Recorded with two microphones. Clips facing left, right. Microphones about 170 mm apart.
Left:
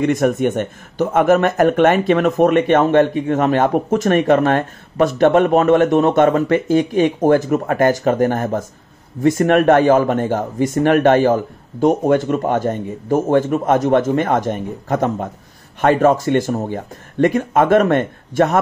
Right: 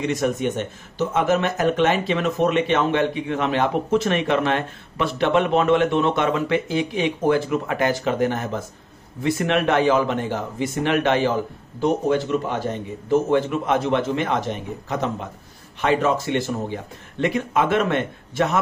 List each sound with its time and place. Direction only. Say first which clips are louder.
0.0 s speech: left 6 dB; 55° left (ahead or behind)